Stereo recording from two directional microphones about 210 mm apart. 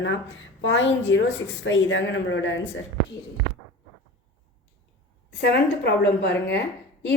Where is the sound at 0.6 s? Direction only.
60° left (ahead or behind).